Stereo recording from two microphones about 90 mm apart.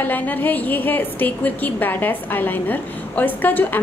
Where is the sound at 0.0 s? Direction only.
20° left (ahead or behind).